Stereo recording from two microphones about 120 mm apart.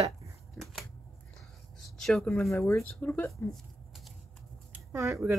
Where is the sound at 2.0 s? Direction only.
5° left (ahead or behind).